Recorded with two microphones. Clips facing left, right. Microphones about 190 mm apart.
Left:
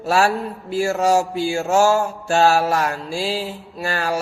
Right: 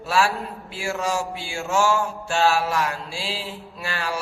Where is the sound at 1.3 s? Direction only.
40° left (ahead or behind).